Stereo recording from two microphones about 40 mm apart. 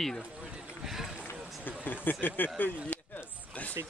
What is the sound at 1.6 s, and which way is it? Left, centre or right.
Speech, left.